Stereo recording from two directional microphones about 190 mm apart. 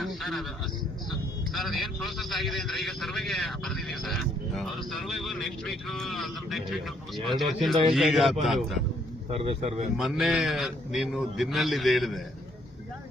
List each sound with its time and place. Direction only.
0.0 s a sound: centre (ahead or behind)
1.5 s a man's voice: centre (ahead or behind)
9.3 s speech: 30° right (ahead or behind)
10.0 s a man's voice: centre (ahead or behind)